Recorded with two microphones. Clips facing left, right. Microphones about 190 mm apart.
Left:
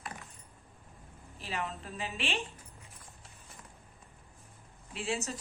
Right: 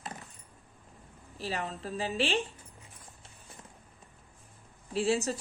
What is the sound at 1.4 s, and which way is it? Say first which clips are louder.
Speech: right 3 dB; 35° right (ahead or behind).